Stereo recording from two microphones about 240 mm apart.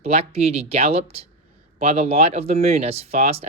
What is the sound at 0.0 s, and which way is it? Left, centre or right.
Speech, right.